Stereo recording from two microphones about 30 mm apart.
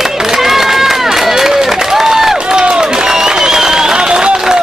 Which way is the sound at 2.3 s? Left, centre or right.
Right.